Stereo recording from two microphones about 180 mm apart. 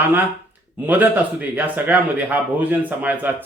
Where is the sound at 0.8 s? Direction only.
10° right (ahead or behind).